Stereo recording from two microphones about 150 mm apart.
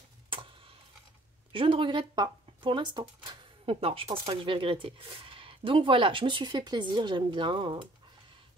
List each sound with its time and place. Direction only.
0.3 s tick-tock: 35° right (ahead or behind)
1.5 s speech: 35° right (ahead or behind)